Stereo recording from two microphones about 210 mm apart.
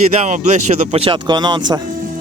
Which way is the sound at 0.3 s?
35° right (ahead or behind).